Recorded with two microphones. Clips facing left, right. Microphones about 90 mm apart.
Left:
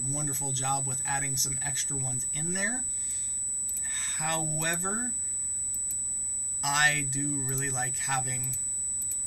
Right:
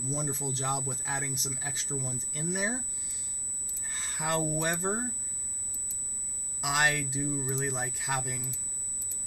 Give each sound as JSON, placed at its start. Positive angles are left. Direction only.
{"t": 0.0, "sound": "speech", "side_deg": -15}
{"t": 3.8, "sound": "a sound", "side_deg": -15}
{"t": 4.7, "sound": "speech", "side_deg": -5}
{"t": 6.6, "sound": "speech", "side_deg": -10}